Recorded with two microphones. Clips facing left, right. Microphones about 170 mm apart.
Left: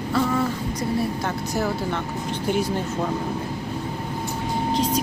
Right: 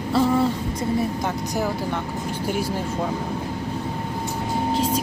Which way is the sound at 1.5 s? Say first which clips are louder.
Left 2 dB; 15° right (ahead or behind).